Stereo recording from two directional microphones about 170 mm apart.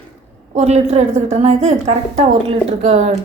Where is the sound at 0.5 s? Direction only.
40° right (ahead or behind).